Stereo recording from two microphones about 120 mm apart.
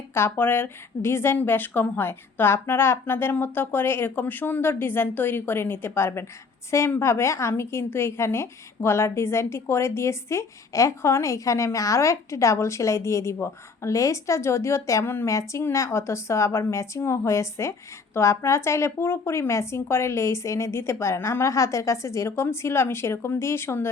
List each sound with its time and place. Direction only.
0.1 s a woman's voice: 20° left (ahead or behind)